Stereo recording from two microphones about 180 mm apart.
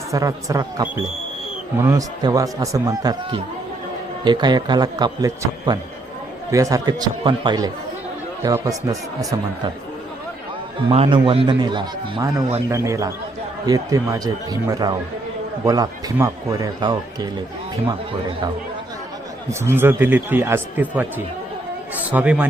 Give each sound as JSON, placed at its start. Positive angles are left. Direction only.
{"t": 0.1, "sound": "a man's voice", "side_deg": -20}
{"t": 10.8, "sound": "a man's voice", "side_deg": -30}
{"t": 19.5, "sound": "a man's voice", "side_deg": -15}